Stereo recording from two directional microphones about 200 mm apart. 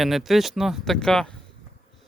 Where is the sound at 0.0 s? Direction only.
Centre (ahead or behind).